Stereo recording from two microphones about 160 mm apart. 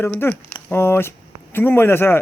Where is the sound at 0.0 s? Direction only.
15° left (ahead or behind).